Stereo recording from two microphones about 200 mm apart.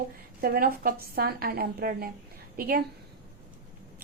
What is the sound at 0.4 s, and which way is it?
A woman's voice, 45° right (ahead or behind).